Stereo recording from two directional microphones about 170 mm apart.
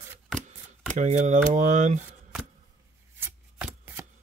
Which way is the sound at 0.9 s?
45° right (ahead or behind).